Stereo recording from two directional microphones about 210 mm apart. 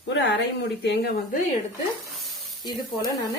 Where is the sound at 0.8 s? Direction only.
50° left (ahead or behind).